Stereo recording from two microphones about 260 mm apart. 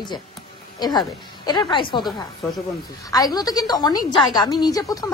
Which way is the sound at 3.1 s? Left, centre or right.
Centre.